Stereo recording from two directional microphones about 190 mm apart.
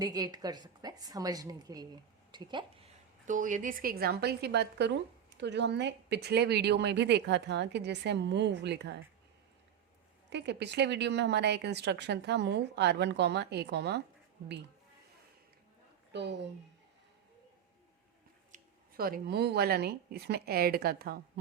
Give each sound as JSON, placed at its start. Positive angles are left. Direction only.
{"t": 0.0, "sound": "a woman's voice", "side_deg": -20}
{"t": 3.2, "sound": "a woman's voice", "side_deg": -40}
{"t": 10.2, "sound": "a woman's voice", "side_deg": -65}
{"t": 16.1, "sound": "a woman's voice", "side_deg": -65}
{"t": 18.5, "sound": "speech", "side_deg": -50}